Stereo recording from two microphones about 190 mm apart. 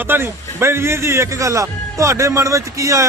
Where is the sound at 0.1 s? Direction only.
15° right (ahead or behind).